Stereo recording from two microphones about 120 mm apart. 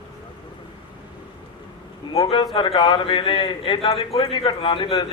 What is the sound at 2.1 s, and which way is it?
Speech, 50° left (ahead or behind).